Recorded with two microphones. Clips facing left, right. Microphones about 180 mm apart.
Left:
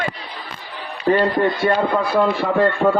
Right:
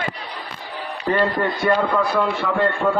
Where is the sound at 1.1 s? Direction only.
30° left (ahead or behind).